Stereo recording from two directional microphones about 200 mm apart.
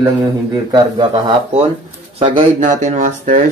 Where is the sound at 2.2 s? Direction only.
35° right (ahead or behind).